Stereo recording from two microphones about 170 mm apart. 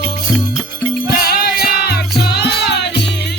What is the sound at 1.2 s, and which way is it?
Music, 65° left (ahead or behind).